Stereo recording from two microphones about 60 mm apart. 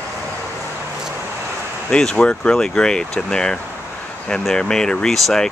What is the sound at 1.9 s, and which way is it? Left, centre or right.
Speech, centre.